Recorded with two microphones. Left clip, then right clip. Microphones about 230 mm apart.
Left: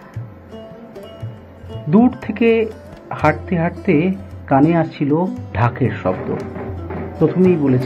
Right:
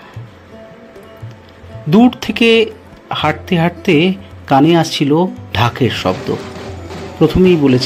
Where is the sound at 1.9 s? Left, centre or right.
Right.